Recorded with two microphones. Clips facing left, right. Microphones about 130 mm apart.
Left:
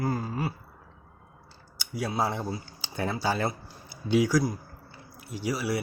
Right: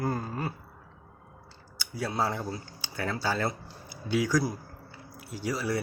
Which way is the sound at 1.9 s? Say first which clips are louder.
Left 1 dB; 10° left (ahead or behind).